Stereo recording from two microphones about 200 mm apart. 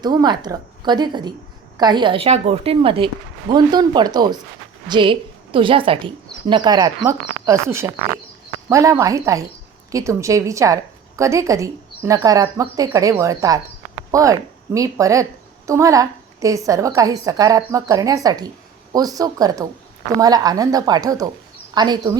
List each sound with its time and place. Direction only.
0.0 s a woman's voice: 20° right (ahead or behind)